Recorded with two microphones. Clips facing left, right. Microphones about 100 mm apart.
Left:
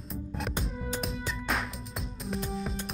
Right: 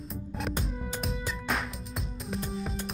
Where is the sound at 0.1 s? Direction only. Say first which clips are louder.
Even; centre (ahead or behind).